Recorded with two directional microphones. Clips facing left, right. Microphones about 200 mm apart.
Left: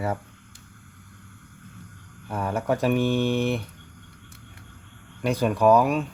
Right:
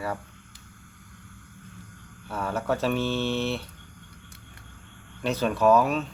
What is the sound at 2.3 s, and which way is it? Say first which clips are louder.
Speech: left 2 dB; 15° left (ahead or behind).